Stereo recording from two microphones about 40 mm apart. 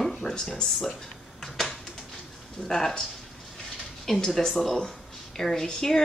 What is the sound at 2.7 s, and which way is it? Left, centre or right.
Speech, centre.